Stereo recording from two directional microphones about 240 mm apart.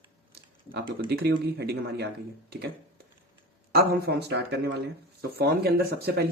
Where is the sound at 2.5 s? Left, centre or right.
Right.